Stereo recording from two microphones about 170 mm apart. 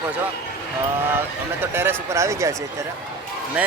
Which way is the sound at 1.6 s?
15° right (ahead or behind).